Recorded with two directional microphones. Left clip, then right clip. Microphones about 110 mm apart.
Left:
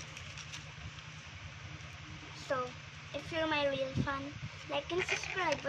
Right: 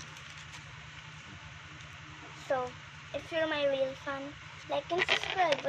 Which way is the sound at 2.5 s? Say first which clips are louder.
Right 4 dB; 30° left (ahead or behind).